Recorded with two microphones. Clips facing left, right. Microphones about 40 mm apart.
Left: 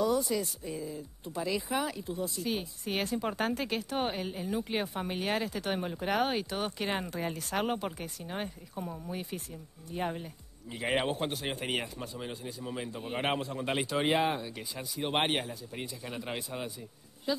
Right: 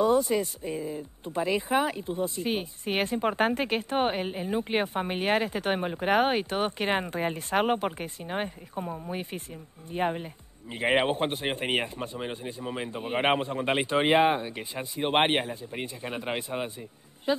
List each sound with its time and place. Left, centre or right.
0.0 s a woman's voice: right